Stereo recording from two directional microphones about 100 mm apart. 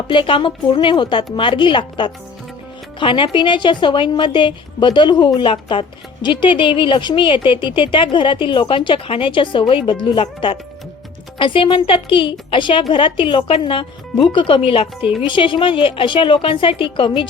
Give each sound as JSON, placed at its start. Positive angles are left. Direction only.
{"t": 0.1, "sound": "a woman's voice", "side_deg": 60}
{"t": 15.3, "sound": "a woman's voice", "side_deg": 55}